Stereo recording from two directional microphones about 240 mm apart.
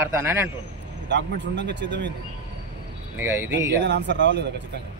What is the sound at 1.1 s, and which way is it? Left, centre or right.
Speech, right.